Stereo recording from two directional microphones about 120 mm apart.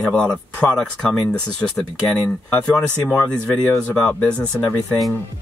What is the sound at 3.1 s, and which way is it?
Speech, 20° left (ahead or behind).